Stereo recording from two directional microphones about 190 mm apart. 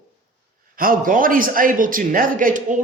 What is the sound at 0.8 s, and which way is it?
A man's voice, 45° right (ahead or behind).